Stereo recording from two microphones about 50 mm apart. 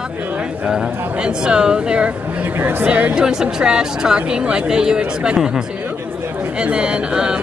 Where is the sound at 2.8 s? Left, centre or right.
Right.